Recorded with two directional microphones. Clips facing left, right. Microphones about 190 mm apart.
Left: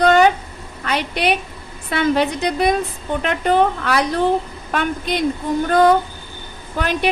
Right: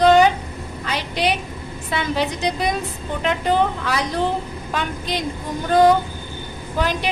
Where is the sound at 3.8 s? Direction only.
60° left (ahead or behind).